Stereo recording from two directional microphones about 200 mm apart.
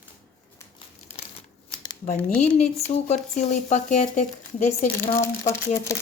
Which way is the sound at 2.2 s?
5° left (ahead or behind).